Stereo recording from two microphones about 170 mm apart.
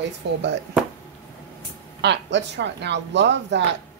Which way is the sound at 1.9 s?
90° right.